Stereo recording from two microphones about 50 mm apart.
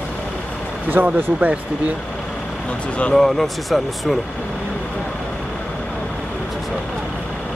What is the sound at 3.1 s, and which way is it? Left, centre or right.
Speech, centre.